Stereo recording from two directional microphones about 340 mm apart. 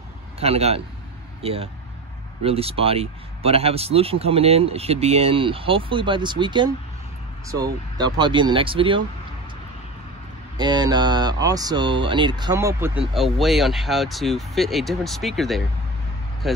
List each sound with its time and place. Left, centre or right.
0.4 s speech: centre
10.6 s speech: centre